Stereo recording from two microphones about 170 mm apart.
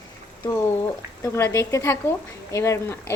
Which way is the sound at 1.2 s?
15° left (ahead or behind).